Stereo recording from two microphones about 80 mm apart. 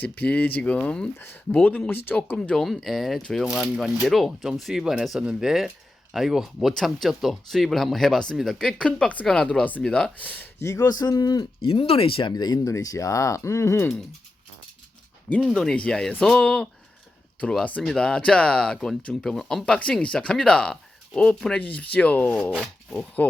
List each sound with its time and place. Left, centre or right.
0.0 s speech: centre
2.6 s speech: centre
10.6 s speech: left
11.6 s speech: left
12.3 s speech: left
12.6 s speech: left
15.4 s speech: centre
17.8 s speech: centre
22.4 s speech: centre